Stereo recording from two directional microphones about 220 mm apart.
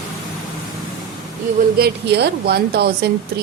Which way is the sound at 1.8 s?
50° right (ahead or behind).